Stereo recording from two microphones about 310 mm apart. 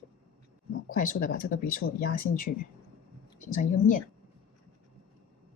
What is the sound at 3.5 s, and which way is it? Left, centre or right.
Speech, left.